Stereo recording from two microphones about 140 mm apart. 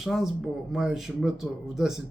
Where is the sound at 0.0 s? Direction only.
Centre (ahead or behind).